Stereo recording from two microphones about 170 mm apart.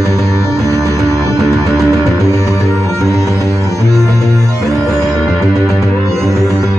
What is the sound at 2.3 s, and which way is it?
Music, 20° left (ahead or behind).